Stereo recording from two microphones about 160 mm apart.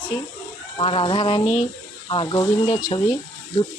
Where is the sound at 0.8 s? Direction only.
35° left (ahead or behind).